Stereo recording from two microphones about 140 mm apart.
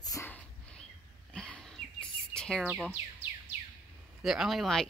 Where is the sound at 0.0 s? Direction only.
25° left (ahead or behind).